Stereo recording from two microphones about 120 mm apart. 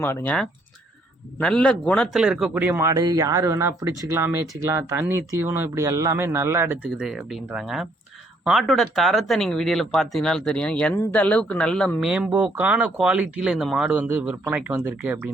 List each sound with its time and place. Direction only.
0.0 s a man's voice: 15° left (ahead or behind)
1.4 s a man's voice: 5° left (ahead or behind)
2.1 s speech: 5° right (ahead or behind)
2.8 s speech: 30° right (ahead or behind); by 12.0 s 10° left (ahead or behind)
12.0 s speech: 5° right (ahead or behind)
13.9 s speech: 15° right (ahead or behind)